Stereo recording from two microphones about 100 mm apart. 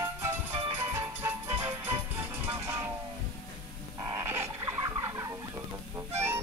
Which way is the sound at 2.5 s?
25° right (ahead or behind).